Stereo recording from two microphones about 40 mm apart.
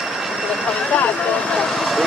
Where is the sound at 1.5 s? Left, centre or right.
Centre.